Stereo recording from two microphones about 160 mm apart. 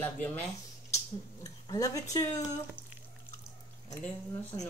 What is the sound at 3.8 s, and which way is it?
Speech, 20° left (ahead or behind).